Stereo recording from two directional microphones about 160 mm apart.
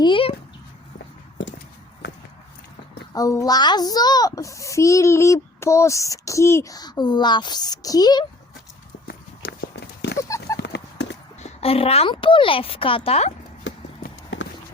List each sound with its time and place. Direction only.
0.0 s a woman's voice: 35° left (ahead or behind)
3.2 s a child's voice: 20° left (ahead or behind)
9.0 s horse: 75° left (ahead or behind); by 10.2 s 90° left
10.2 s clip-clop: 20° left (ahead or behind)
10.6 s horse: 90° left
11.3 s a woman's voice: 40° left (ahead or behind)
13.7 s clip-clop: 90° left